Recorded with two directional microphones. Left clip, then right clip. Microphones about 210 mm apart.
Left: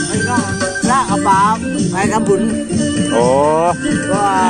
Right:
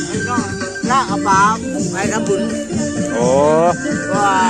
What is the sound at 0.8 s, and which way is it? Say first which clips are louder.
Music: left 1 dB; 25° left (ahead or behind).